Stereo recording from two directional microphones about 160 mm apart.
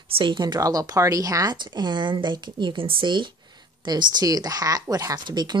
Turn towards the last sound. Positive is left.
turn(degrees=-25)  # may be behind; listen again after turning